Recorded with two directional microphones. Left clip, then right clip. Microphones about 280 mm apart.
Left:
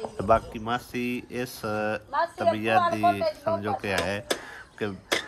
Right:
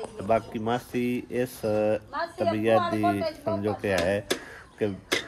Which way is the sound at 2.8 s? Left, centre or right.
Left.